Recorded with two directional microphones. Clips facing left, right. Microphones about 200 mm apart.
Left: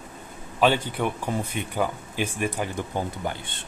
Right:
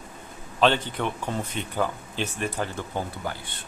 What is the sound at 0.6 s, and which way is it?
A man's voice, 10° left (ahead or behind).